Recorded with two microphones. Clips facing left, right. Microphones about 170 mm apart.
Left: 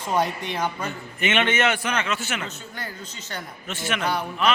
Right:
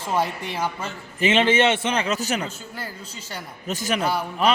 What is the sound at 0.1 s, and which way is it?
Speech, 5° right (ahead or behind).